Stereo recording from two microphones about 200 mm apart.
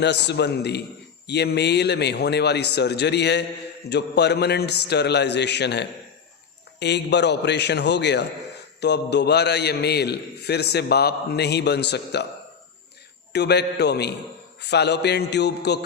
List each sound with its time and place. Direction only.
0.0 s a man's voice: 60° left (ahead or behind)
13.3 s a man's voice: 55° left (ahead or behind)